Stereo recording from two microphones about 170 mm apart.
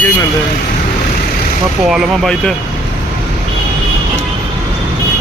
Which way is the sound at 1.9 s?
Centre (ahead or behind).